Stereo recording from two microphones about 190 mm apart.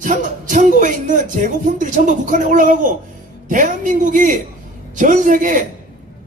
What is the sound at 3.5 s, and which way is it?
A woman's voice, 45° right (ahead or behind).